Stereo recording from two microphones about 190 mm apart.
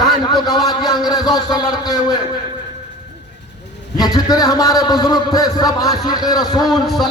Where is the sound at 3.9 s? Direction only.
20° left (ahead or behind).